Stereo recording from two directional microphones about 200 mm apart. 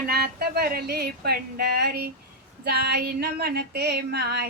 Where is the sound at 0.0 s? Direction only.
50° right (ahead or behind).